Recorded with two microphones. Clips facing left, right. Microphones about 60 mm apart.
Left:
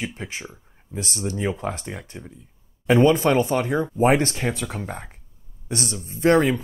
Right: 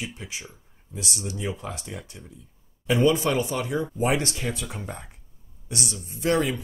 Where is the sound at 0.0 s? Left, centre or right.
Left.